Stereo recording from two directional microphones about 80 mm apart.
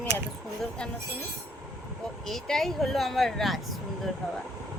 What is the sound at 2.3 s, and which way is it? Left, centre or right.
Speech, centre.